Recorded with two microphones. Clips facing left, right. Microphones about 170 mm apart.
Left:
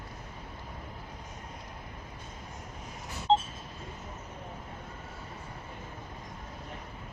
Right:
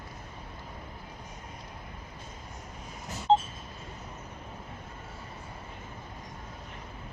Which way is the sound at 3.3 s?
55° right (ahead or behind).